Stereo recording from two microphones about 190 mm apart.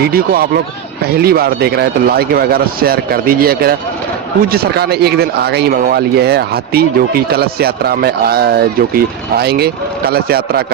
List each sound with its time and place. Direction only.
0.0 s a man's voice: 50° right (ahead or behind)